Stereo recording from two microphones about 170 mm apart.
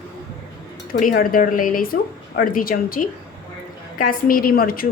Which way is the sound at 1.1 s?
55° left (ahead or behind).